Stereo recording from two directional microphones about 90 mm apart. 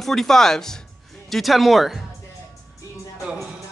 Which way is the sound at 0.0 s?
5° left (ahead or behind).